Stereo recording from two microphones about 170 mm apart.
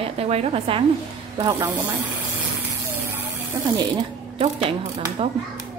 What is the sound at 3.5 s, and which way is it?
Speech, 20° right (ahead or behind).